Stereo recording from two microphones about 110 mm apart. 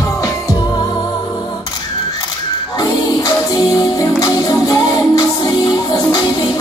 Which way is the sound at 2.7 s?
35° left (ahead or behind).